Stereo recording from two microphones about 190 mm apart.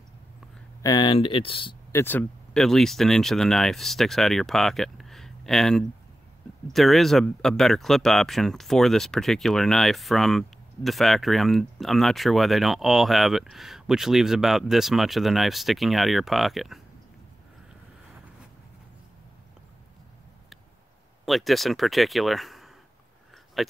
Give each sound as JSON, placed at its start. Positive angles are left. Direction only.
{"t": 0.8, "sound": "speech", "side_deg": 25}
{"t": 1.9, "sound": "speech", "side_deg": 10}
{"t": 21.3, "sound": "speech", "side_deg": 0}